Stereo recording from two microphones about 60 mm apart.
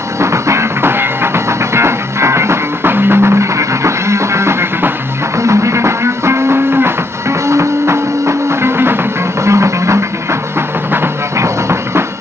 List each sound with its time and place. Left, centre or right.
0.2 s music: right
9.4 s music: right
11.3 s music: right